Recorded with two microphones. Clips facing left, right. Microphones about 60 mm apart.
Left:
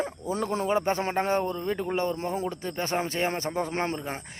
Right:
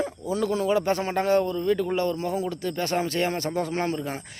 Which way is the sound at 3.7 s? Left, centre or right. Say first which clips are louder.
Right 2 dB; left.